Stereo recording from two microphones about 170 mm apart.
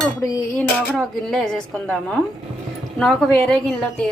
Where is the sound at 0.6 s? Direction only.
5° left (ahead or behind).